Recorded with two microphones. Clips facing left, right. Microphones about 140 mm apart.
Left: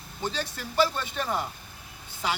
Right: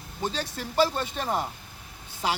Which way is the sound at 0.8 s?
40° right (ahead or behind).